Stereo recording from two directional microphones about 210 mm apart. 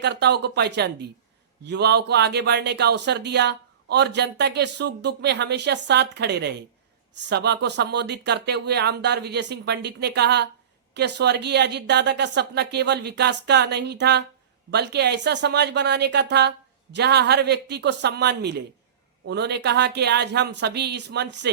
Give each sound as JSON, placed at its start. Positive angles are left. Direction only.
{"t": 0.0, "sound": "speech", "side_deg": -55}